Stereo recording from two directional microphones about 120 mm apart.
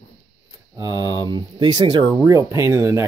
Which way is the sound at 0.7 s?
35° right (ahead or behind).